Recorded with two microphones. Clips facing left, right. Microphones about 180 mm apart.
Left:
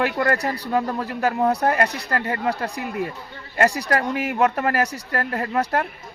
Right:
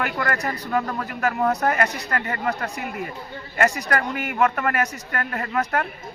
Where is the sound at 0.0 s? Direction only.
30° left (ahead or behind).